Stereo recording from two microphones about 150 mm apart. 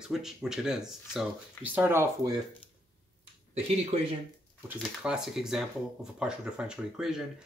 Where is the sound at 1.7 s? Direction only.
15° right (ahead or behind).